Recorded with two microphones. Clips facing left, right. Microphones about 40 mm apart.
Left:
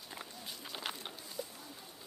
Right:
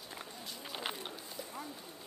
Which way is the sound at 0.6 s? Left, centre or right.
Centre.